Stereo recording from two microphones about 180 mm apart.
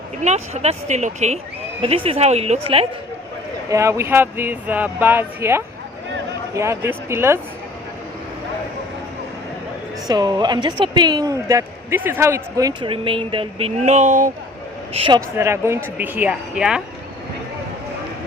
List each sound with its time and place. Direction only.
0.2 s speech: 40° right (ahead or behind)
3.7 s speech: 15° right (ahead or behind)
10.1 s speech: 25° right (ahead or behind); by 14.3 s 45° right (ahead or behind)
14.9 s speech: 30° right (ahead or behind)
15.4 s speech: 15° right (ahead or behind)